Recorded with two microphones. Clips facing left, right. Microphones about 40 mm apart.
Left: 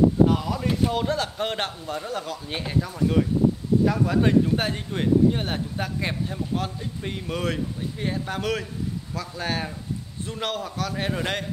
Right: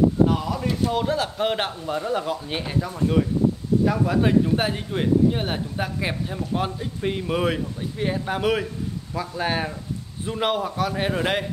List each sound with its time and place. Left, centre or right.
0.3 s speech: centre
2.0 s speech: centre